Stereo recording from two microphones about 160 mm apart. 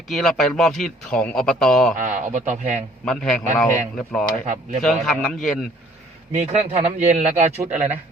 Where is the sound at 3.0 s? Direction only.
5° left (ahead or behind).